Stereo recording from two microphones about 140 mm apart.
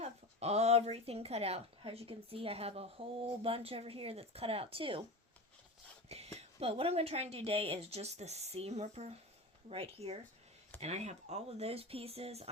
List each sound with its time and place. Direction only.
0.0 s a woman's voice: 50° right (ahead or behind)
6.1 s a woman's voice: 50° right (ahead or behind)